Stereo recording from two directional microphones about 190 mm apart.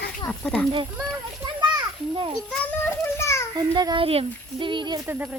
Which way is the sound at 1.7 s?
25° right (ahead or behind).